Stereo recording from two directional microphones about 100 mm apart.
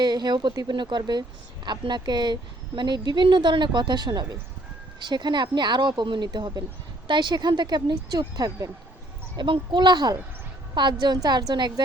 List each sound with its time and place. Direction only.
0.0 s speech: 45° right (ahead or behind)